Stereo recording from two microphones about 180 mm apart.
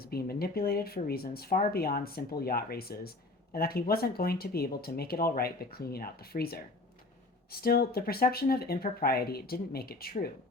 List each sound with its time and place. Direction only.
0.0 s speech: 60° left (ahead or behind)
7.6 s speech: 60° left (ahead or behind)